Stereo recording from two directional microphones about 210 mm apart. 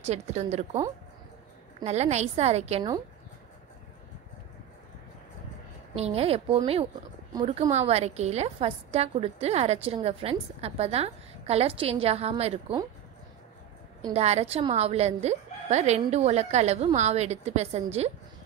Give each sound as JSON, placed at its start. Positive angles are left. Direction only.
{"t": 0.0, "sound": "a woman's voice", "side_deg": -30}
{"t": 1.9, "sound": "a woman's voice", "side_deg": -30}
{"t": 5.9, "sound": "a woman's voice", "side_deg": -30}
{"t": 14.1, "sound": "a woman's voice", "side_deg": -30}